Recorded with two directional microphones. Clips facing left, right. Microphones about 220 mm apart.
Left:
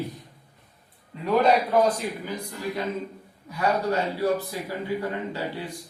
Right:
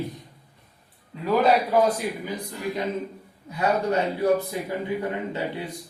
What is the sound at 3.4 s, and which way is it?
Speech, 20° right (ahead or behind).